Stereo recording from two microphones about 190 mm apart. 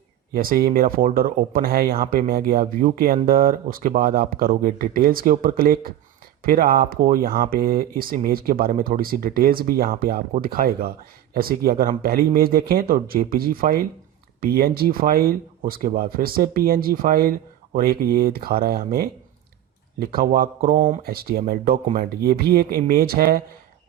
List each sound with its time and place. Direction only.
0.3 s speech: 50° right (ahead or behind)